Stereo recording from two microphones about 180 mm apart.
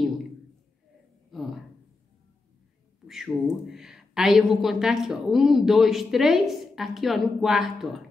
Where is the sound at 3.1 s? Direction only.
Centre (ahead or behind).